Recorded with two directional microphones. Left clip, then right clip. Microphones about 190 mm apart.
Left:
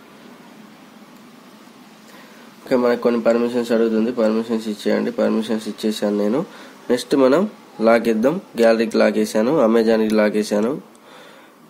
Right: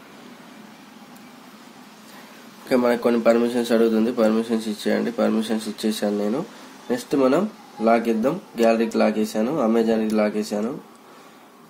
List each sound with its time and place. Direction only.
2.7 s a man's voice: 15° left (ahead or behind)
6.9 s speech: 35° left (ahead or behind)